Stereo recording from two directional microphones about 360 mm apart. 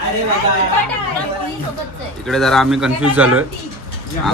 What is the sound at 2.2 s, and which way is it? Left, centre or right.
Speech, centre.